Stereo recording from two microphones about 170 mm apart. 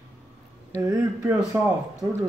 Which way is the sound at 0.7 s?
20° right (ahead or behind).